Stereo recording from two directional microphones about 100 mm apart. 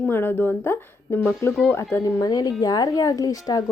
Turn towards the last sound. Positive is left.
turn(degrees=35)  # may be behind; listen again after turning